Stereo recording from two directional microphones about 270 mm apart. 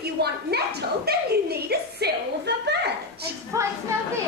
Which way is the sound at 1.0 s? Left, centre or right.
Right.